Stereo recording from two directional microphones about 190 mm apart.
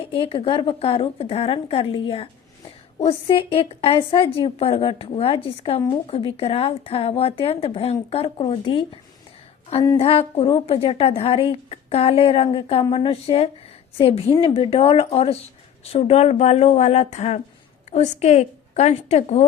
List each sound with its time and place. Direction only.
0.0 s speech: 30° left (ahead or behind)
10.0 s a woman's voice: 30° left (ahead or behind)